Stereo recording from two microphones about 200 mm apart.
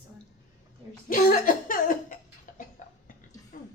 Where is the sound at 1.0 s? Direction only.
45° left (ahead or behind).